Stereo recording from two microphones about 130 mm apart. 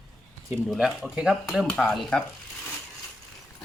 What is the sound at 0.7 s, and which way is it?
Speech, centre (ahead or behind).